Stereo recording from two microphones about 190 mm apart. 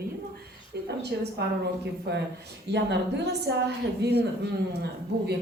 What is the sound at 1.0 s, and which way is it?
A woman's voice, 60° right (ahead or behind).